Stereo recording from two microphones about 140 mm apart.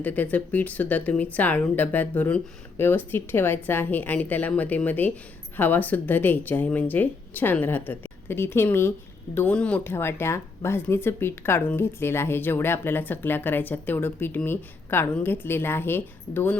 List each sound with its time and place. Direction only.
0.0 s speech: 10° left (ahead or behind)